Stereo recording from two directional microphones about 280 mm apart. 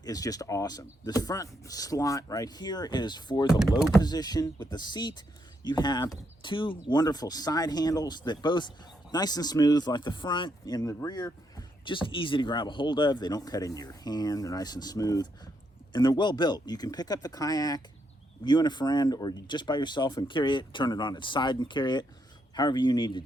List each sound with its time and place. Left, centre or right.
0.0 s speech: centre
3.5 s speech: centre
4.0 s speech: centre